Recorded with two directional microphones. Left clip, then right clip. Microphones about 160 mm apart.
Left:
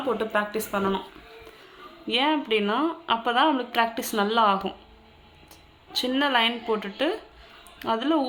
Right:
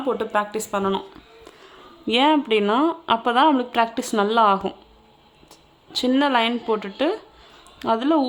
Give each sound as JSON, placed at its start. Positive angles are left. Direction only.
{"t": 0.1, "sound": "speech", "side_deg": -40}
{"t": 2.0, "sound": "speech", "side_deg": -55}
{"t": 5.9, "sound": "speech", "side_deg": -45}